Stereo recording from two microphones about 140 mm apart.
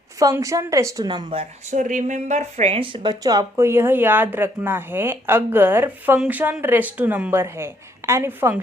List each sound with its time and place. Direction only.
0.2 s a woman's voice: 25° right (ahead or behind)
1.7 s a woman's voice: 65° right (ahead or behind); by 8.5 s 15° right (ahead or behind)